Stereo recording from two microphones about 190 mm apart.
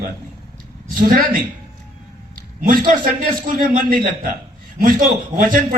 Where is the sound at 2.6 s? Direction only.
45° right (ahead or behind).